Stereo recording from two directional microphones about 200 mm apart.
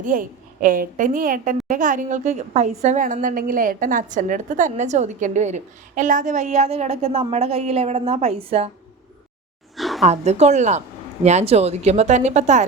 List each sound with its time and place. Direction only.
0.0 s a woman's voice: 40° right (ahead or behind)
9.7 s a sound: centre (ahead or behind)
10.1 s a woman's voice: 35° right (ahead or behind)